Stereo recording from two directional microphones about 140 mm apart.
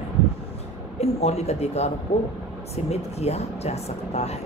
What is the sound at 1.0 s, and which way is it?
Speech, 45° left (ahead or behind).